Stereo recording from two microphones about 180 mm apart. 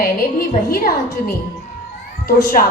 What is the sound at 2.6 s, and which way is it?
Speech, 50° left (ahead or behind).